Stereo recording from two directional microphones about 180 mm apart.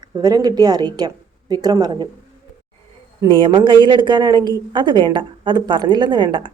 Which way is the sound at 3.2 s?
25° right (ahead or behind).